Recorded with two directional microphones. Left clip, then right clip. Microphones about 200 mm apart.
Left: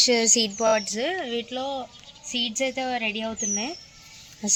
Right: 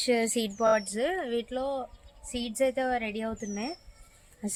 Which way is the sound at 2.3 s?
25° right (ahead or behind).